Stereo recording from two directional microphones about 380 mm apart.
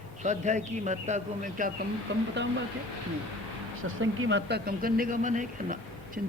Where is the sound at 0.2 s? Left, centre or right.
Centre.